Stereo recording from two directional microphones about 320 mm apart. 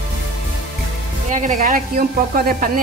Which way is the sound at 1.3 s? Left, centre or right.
Right.